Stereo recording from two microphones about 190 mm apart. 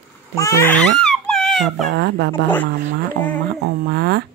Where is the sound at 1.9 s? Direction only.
60° right (ahead or behind).